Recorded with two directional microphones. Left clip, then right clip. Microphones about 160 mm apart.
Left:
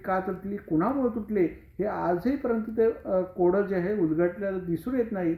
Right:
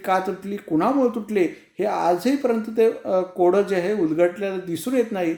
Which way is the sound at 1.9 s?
40° right (ahead or behind).